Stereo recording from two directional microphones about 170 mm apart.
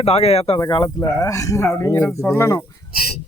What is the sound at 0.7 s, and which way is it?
Speech, 25° left (ahead or behind).